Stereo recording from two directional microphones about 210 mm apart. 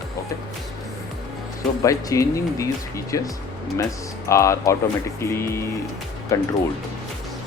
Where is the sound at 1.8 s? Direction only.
15° left (ahead or behind).